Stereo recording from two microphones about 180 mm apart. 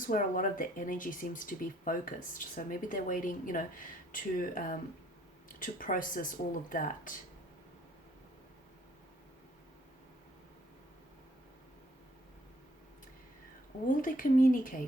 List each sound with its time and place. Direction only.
0.0 s speech: 50° left (ahead or behind)
13.8 s speech: 50° left (ahead or behind)